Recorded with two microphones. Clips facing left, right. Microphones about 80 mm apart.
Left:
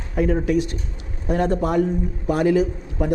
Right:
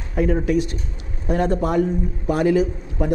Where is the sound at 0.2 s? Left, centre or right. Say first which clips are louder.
Even; right.